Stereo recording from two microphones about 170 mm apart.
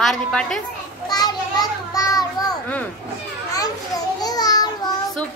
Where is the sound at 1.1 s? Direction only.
25° left (ahead or behind).